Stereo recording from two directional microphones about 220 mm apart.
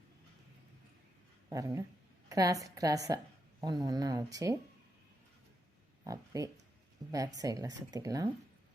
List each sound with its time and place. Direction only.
1.5 s a sound: 15° right (ahead or behind)
2.3 s speech: 15° right (ahead or behind)
6.1 s speech: 15° right (ahead or behind)